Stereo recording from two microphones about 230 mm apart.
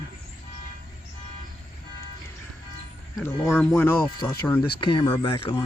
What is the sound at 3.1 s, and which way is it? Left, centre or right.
Speech, centre.